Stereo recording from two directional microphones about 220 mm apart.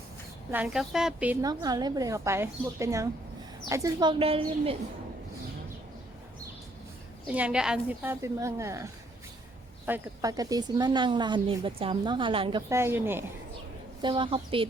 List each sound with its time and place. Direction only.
0.5 s a woman's voice: 5° right (ahead or behind); by 4.8 s 25° right (ahead or behind)
7.3 s a woman's voice: 5° right (ahead or behind); by 12.6 s 25° right (ahead or behind)
12.6 s a woman's voice: 10° right (ahead or behind)
14.0 s speech: 20° right (ahead or behind)